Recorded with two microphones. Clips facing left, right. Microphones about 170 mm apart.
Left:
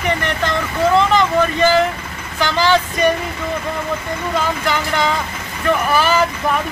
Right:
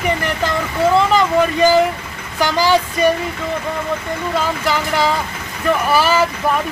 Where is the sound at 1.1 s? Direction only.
10° right (ahead or behind).